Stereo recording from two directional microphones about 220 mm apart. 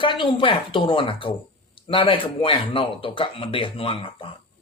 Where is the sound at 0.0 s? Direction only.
20° left (ahead or behind).